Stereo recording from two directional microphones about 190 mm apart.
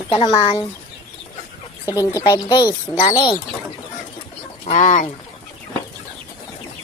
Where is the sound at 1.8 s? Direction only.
15° left (ahead or behind).